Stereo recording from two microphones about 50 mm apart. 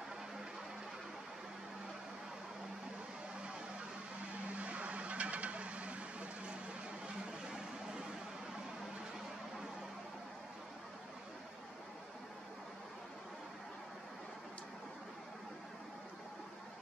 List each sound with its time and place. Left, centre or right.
4.6 s vehicle: right